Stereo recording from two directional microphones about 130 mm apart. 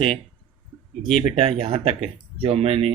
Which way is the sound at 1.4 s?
50° right (ahead or behind).